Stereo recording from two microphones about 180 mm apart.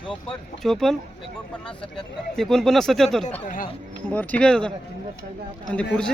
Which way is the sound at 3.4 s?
50° left (ahead or behind).